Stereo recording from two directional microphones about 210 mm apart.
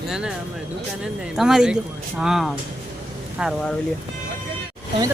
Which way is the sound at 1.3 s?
5° right (ahead or behind).